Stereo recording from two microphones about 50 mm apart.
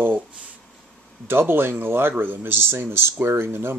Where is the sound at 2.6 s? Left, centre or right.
Right.